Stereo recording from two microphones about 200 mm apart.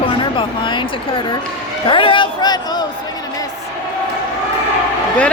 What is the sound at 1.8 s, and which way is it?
A man's voice, 25° left (ahead or behind).